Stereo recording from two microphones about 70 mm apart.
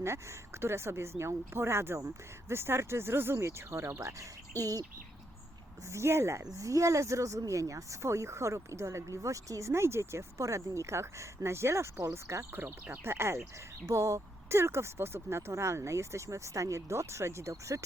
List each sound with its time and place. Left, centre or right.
0.0 s speech: right
5.9 s speech: right
6.6 s speech: right
12.5 s speech: right
13.8 s speech: right